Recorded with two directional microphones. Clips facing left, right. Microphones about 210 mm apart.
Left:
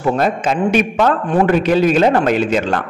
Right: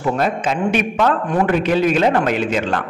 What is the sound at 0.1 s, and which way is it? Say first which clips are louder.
A man's voice: left 3 dB; 40° left (ahead or behind).